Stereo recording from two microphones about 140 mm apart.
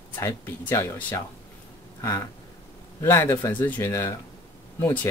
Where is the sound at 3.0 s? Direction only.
15° left (ahead or behind).